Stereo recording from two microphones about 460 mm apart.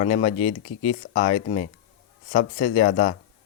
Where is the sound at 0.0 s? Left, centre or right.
Centre.